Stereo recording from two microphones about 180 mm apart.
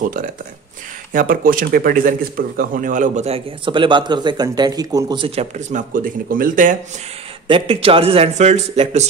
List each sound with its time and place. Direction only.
0.0 s speech: 50° right (ahead or behind)
7.4 s speech: 30° right (ahead or behind)